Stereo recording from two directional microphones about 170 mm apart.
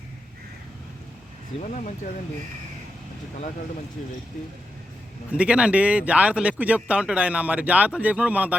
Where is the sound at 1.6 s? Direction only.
45° left (ahead or behind).